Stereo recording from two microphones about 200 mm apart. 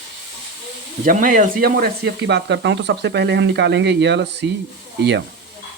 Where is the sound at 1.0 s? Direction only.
40° right (ahead or behind); by 4.5 s 60° right (ahead or behind).